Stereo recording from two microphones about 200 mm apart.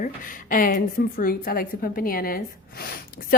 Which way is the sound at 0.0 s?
45° left (ahead or behind).